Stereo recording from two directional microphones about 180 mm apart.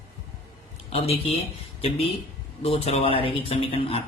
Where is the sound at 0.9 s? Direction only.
35° left (ahead or behind).